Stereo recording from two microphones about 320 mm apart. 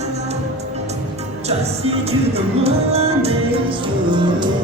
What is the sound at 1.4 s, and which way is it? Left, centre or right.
Music, centre.